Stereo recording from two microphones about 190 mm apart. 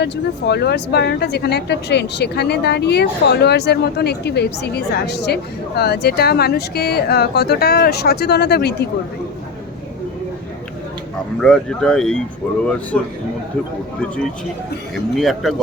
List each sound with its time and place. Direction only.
0.0 s speech: 60° left (ahead or behind)
11.3 s speech: 5° left (ahead or behind)
14.9 s speech: centre (ahead or behind)